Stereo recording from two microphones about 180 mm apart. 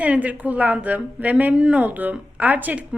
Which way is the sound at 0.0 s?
10° right (ahead or behind).